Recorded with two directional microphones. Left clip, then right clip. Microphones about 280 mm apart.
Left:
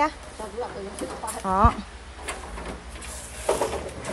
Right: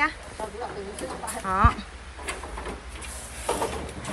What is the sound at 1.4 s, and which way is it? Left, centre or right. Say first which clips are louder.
Speech: left 2 dB; centre.